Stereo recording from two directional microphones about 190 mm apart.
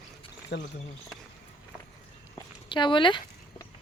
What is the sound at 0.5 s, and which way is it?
Speech, 60° left (ahead or behind).